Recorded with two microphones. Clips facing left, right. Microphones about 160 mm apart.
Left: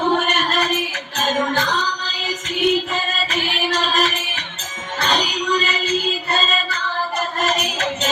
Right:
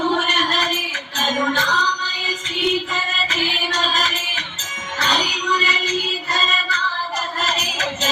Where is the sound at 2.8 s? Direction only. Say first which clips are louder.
Left 2 dB; 55° left (ahead or behind).